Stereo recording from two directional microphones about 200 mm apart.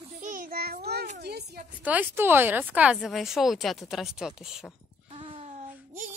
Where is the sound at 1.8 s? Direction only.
10° right (ahead or behind).